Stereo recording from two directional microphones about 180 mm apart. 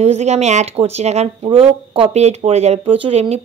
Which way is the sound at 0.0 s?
40° right (ahead or behind).